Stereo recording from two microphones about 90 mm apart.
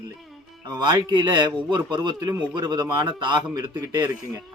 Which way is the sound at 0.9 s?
55° right (ahead or behind).